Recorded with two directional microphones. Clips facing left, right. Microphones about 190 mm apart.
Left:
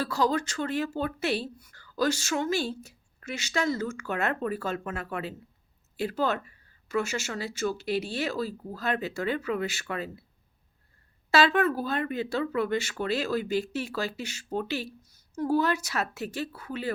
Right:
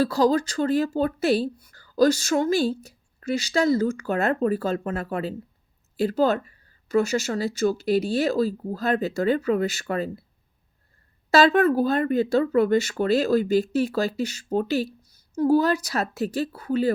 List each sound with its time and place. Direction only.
0.0 s speech: 35° right (ahead or behind)
11.3 s speech: 40° right (ahead or behind)